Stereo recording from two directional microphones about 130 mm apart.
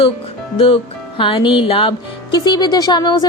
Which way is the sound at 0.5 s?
45° left (ahead or behind).